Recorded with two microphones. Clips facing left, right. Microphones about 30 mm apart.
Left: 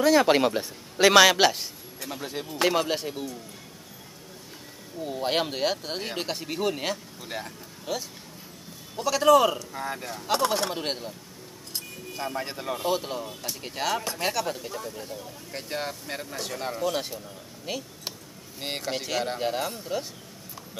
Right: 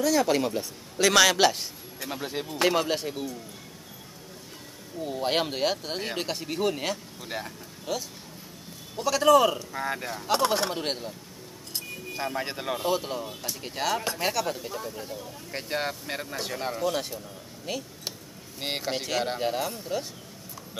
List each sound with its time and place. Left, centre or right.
0.0 s a man's voice: left; by 2.0 s centre
2.0 s speech: centre
5.0 s speech: centre
9.6 s speech: centre
12.1 s speech: centre
12.8 s speech: centre
15.5 s speech: centre
16.9 s speech: centre
18.6 s speech: centre